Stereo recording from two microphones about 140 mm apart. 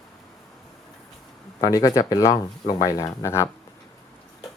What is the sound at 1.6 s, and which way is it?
Speech, 25° left (ahead or behind).